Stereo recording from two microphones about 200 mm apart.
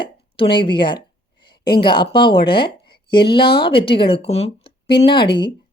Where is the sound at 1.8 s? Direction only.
25° left (ahead or behind).